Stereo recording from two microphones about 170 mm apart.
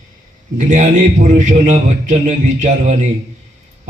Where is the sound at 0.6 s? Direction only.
45° right (ahead or behind).